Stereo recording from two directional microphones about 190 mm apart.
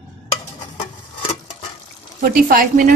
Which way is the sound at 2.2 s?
45° right (ahead or behind).